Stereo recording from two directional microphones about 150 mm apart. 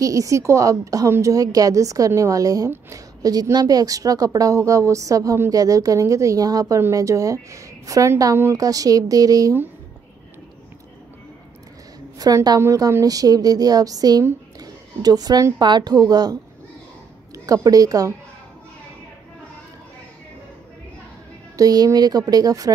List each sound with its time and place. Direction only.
0.0 s a woman's voice: 20° right (ahead or behind)
12.2 s a woman's voice: 25° right (ahead or behind)
17.5 s a woman's voice: 25° right (ahead or behind)
21.5 s a woman's voice: 25° right (ahead or behind)